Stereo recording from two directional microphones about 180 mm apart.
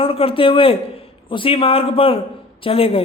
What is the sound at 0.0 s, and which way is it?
Speech, 30° left (ahead or behind).